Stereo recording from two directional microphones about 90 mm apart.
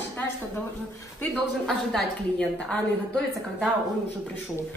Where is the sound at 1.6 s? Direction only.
5° left (ahead or behind).